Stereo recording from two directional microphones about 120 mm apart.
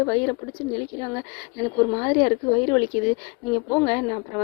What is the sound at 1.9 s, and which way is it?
Speech, 40° left (ahead or behind).